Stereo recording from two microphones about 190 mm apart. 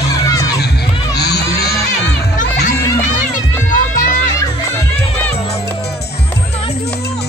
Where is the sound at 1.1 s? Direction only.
60° left (ahead or behind).